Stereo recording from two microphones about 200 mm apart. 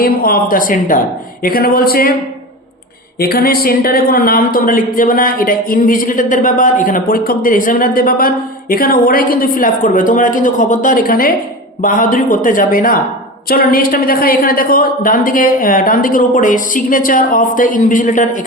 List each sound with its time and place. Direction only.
0.0 s a woman's voice: 45° left (ahead or behind)
3.2 s a woman's voice: 50° left (ahead or behind)